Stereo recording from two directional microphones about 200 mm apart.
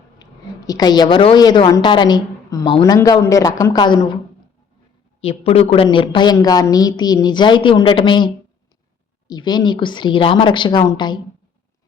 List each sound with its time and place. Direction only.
0.2 s a woman's voice: 20° left (ahead or behind)
5.2 s a woman's voice: 30° left (ahead or behind)